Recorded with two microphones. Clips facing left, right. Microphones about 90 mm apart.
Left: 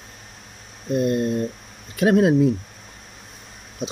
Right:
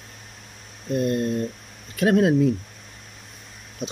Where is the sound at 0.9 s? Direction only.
15° left (ahead or behind).